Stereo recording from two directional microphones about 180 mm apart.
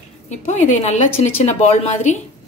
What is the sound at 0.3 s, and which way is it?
A woman's voice, 40° left (ahead or behind).